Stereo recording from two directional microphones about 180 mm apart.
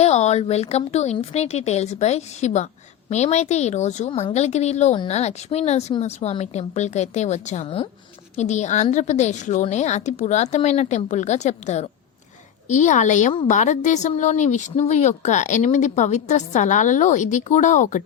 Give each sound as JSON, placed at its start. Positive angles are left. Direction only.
{"t": 0.0, "sound": "a woman's voice", "side_deg": 40}